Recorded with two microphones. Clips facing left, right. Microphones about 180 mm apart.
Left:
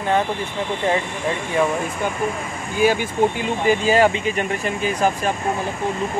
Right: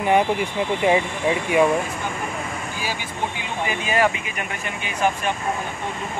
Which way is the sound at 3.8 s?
30° left (ahead or behind).